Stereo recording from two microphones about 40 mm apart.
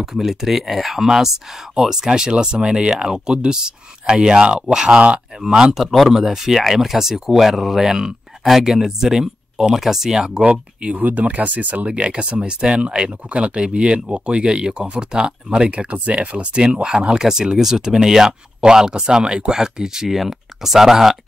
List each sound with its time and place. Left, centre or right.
0.0 s speech: centre
5.8 s speech: centre
6.0 s speech: centre
10.4 s speech: right
11.0 s speech: right
15.7 s speech: right; by 21.2 s centre